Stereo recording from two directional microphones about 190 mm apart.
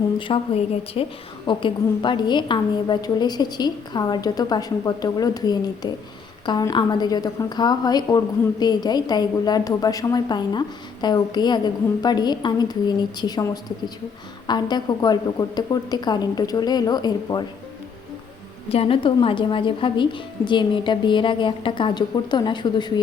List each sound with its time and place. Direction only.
0.3 s a woman's voice: 30° left (ahead or behind)
18.7 s a woman's voice: 30° left (ahead or behind)